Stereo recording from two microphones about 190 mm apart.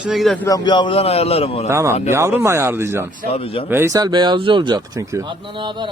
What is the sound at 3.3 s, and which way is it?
Speech, 30° left (ahead or behind).